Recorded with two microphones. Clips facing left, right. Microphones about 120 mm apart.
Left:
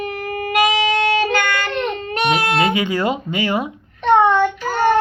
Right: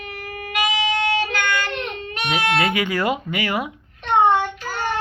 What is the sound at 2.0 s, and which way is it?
Baby cry, 45° left (ahead or behind).